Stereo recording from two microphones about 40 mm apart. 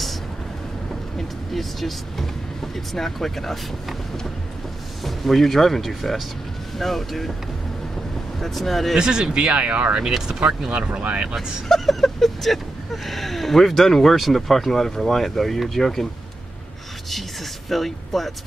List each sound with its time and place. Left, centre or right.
1.1 s speech: centre
5.0 s speech: centre
8.4 s speech: centre
8.9 s speech: centre
10.1 s speech: centre
10.7 s speech: right
11.7 s speech: centre
17.6 s speech: centre